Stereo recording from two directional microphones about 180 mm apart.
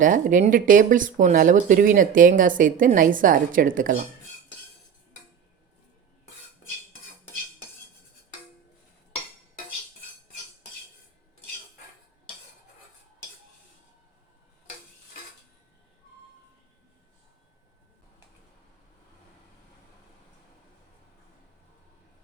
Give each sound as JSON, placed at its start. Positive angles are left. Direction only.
{"t": 0.0, "sound": "speech", "side_deg": -45}